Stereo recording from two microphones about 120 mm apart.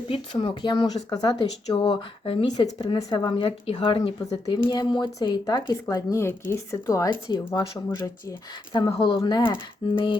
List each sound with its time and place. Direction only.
0.1 s speech: 45° left (ahead or behind); by 7.1 s 25° left (ahead or behind)
7.1 s speech: 40° left (ahead or behind)
8.7 s speech: 45° left (ahead or behind)